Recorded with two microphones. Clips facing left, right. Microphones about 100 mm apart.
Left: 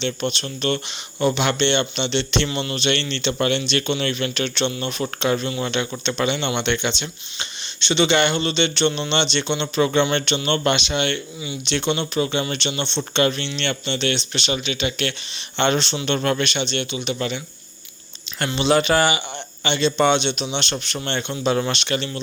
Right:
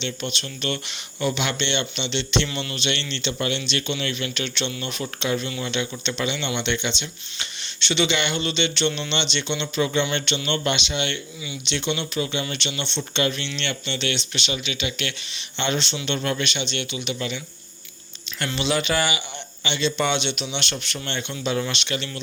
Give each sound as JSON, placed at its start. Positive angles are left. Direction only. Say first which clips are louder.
{"t": 0.0, "sound": "speech", "louder": "left 5 dB", "side_deg": 40}
{"t": 2.5, "sound": "a man's voice", "louder": "left 5 dB", "side_deg": 30}
{"t": 7.3, "sound": "a sound", "louder": "left 2 dB", "side_deg": 25}
{"t": 8.0, "sound": "a man's voice", "louder": "left 6 dB", "side_deg": 40}
{"t": 18.6, "sound": "speech", "louder": "left 6 dB", "side_deg": 40}